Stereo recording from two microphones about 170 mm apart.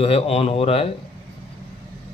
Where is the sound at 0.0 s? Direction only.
35° left (ahead or behind).